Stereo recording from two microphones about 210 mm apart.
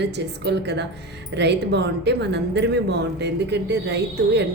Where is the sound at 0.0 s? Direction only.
55° right (ahead or behind).